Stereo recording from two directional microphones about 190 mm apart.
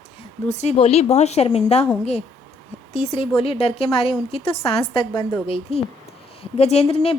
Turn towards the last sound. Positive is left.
turn(degrees=30)  # may be behind; listen again after turning